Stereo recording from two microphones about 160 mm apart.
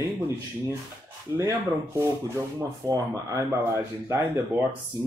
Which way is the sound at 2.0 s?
20° right (ahead or behind).